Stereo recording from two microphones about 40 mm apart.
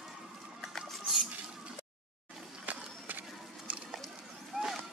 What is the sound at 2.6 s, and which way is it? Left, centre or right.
Run, right.